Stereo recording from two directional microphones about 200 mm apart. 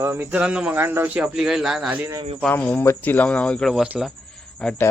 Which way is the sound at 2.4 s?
5° left (ahead or behind).